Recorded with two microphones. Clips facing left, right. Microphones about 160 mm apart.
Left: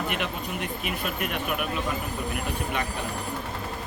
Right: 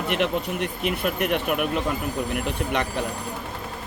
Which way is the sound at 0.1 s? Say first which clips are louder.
Right 6 dB; 65° right (ahead or behind).